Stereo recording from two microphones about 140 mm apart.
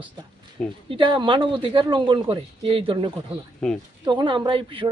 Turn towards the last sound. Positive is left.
turn(degrees=-35)  # may be behind; listen again after turning